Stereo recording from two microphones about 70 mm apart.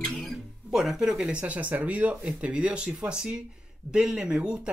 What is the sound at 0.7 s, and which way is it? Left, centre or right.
Speech, centre.